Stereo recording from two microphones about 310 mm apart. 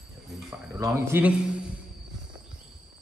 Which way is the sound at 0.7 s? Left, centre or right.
Centre.